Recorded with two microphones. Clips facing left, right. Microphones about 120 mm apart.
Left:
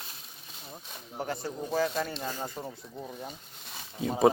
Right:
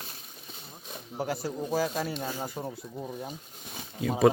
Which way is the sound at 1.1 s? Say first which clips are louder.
Right 2 dB; 5° right (ahead or behind).